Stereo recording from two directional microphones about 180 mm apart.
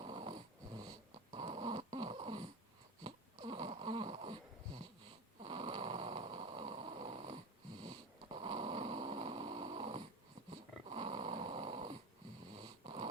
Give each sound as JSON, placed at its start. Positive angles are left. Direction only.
{"t": 0.0, "sound": "dog", "side_deg": -30}
{"t": 3.0, "sound": "a sound", "side_deg": -30}
{"t": 5.4, "sound": "snoring", "side_deg": -30}
{"t": 10.5, "sound": "dog", "side_deg": -35}
{"t": 12.5, "sound": "snoring", "side_deg": -35}